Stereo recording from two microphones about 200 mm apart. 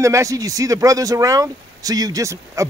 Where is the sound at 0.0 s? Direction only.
15° right (ahead or behind).